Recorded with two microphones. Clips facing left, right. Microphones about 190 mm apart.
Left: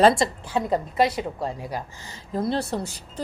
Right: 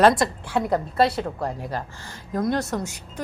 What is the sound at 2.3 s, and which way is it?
Speech, 30° left (ahead or behind).